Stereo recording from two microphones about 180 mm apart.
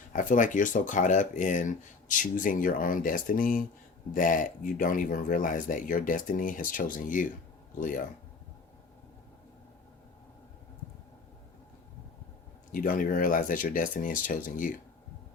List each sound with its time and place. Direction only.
0.1 s speech: 45° left (ahead or behind)
12.7 s speech: 50° left (ahead or behind)